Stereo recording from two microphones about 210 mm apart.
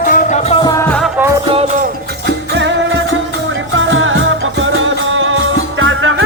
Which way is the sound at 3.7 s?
65° right (ahead or behind).